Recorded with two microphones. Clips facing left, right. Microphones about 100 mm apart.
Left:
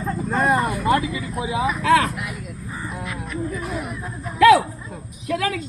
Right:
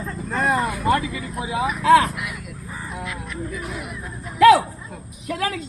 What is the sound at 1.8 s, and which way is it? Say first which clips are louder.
Speech: right 3 dB; 25° right (ahead or behind).